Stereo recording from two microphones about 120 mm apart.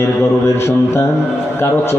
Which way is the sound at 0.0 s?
20° left (ahead or behind).